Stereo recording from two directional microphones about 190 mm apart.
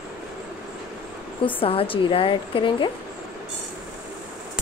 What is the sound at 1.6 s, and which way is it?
A woman's voice, 30° left (ahead or behind).